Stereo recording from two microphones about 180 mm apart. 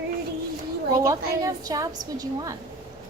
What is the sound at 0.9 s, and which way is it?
A woman's voice, 15° right (ahead or behind).